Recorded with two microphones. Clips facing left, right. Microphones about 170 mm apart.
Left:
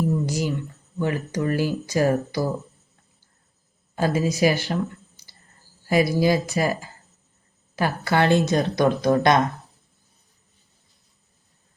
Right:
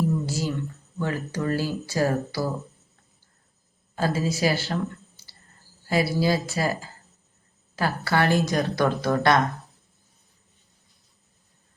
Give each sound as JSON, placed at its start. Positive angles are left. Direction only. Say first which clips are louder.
{"t": 0.3, "sound": "a sound", "louder": "left 3 dB", "side_deg": 15}
{"t": 0.9, "sound": "speech", "louder": "left 3 dB", "side_deg": 15}
{"t": 3.9, "sound": "speech", "louder": "left 3 dB", "side_deg": 15}
{"t": 7.8, "sound": "speech", "louder": "left 2 dB", "side_deg": 20}